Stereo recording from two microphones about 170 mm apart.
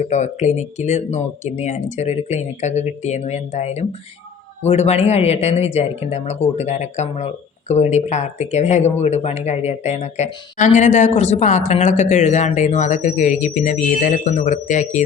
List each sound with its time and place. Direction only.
0.0 s speech: 45° left (ahead or behind)